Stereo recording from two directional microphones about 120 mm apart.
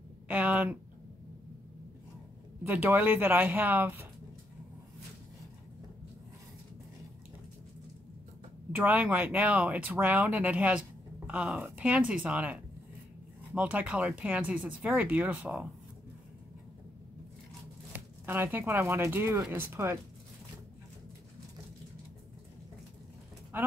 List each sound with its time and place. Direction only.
0.3 s speech: 10° right (ahead or behind)
2.7 s speech: 15° right (ahead or behind)
8.7 s speech: 10° right (ahead or behind)
17.9 s speech: 20° right (ahead or behind)
23.5 s speech: 15° right (ahead or behind)